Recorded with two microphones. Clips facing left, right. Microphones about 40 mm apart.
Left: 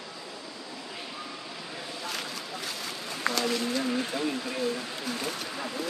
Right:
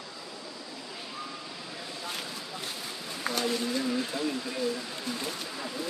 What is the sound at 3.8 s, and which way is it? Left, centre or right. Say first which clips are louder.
Vehicle: left 1 dB; left.